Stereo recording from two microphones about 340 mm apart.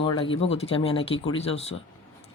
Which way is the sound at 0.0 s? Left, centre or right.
Centre.